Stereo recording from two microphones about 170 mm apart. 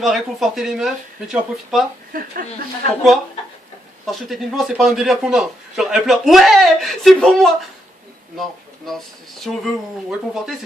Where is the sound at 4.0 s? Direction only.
Centre (ahead or behind).